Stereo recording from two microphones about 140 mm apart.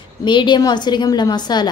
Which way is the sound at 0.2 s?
35° left (ahead or behind).